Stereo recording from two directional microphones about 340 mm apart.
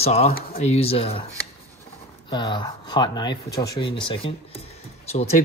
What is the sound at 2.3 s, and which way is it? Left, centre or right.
Speech, centre.